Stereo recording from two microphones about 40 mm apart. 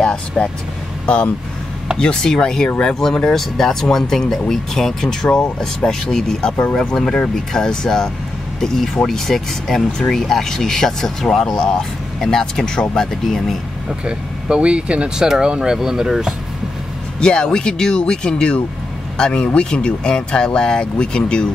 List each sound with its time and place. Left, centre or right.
0.0 s vehicle: centre
1.0 s speech: left; by 13.4 s centre
13.8 s speech: right
15.1 s speech: centre
17.2 s speech: left